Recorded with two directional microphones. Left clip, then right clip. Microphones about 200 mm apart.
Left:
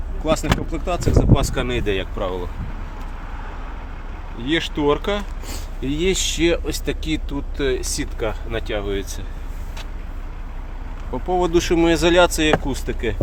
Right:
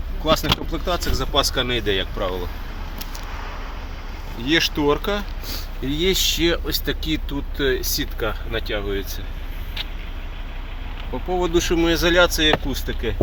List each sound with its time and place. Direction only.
0.3 s speech: 5° right (ahead or behind)
4.4 s speech: centre (ahead or behind)
11.1 s speech: 5° left (ahead or behind)